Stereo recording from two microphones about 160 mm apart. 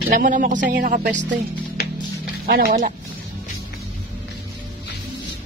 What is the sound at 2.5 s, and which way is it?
Speech, 65° right (ahead or behind).